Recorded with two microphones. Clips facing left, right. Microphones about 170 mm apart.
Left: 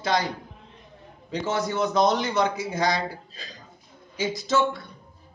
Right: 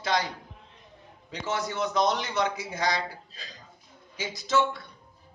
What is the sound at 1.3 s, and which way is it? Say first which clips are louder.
A man's voice: left 5 dB; 45° left (ahead or behind).